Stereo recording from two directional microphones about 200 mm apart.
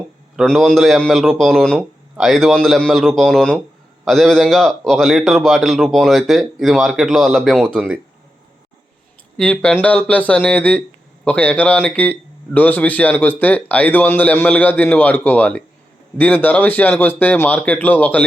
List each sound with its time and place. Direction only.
0.3 s speech: centre (ahead or behind)
9.4 s a man's voice: 5° left (ahead or behind)